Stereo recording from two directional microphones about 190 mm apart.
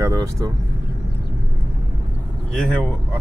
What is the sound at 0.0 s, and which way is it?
Speech, 15° right (ahead or behind).